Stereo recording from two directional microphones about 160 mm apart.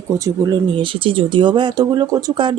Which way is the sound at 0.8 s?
35° right (ahead or behind).